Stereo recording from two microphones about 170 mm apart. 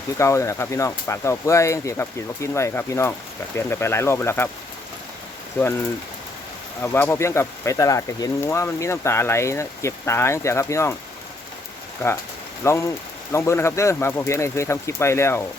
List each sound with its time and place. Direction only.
0.2 s speech: 15° left (ahead or behind)
6.8 s speech: 15° left (ahead or behind)
12.6 s speech: 15° left (ahead or behind)